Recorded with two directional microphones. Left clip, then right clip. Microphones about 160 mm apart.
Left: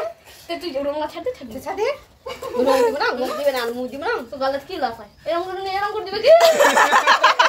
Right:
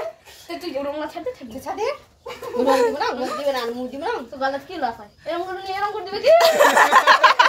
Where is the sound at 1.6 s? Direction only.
Centre (ahead or behind).